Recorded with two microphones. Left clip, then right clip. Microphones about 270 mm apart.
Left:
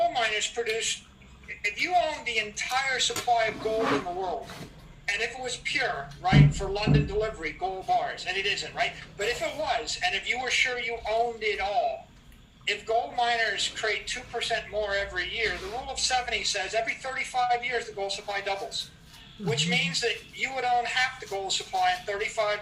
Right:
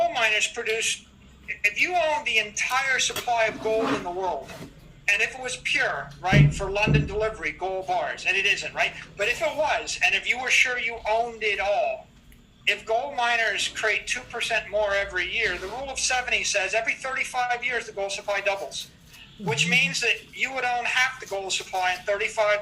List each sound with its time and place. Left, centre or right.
0.0 s a sound: right
1.6 s a man's voice: right
5.0 s a man's voice: right